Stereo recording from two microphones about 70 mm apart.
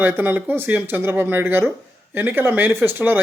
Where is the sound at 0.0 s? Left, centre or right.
Right.